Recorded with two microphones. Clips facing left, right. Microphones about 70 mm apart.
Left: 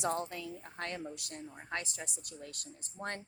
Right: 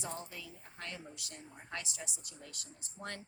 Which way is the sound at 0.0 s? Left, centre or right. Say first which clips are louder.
Left 9 dB; left.